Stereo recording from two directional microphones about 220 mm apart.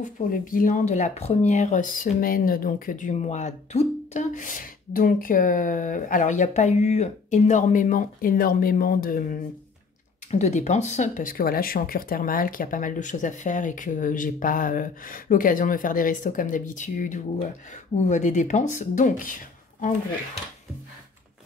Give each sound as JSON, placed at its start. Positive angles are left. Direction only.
{"t": 0.3, "sound": "speech", "side_deg": 40}